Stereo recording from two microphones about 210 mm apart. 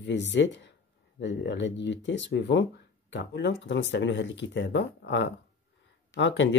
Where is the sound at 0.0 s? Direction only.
55° left (ahead or behind).